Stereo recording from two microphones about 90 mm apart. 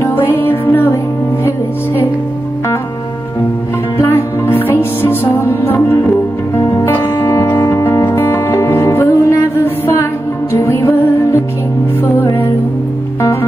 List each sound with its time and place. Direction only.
0.0 s music: 30° left (ahead or behind)
4.0 s music: 25° left (ahead or behind)
10.5 s music: 30° left (ahead or behind)
13.2 s music: 30° left (ahead or behind)